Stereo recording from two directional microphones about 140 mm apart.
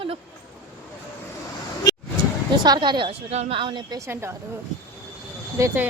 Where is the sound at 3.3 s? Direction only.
45° right (ahead or behind); by 4.1 s 30° right (ahead or behind).